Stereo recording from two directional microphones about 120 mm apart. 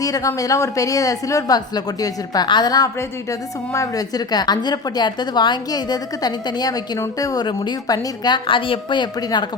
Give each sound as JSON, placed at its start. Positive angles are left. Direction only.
{"t": 0.0, "sound": "a woman's voice", "side_deg": 30}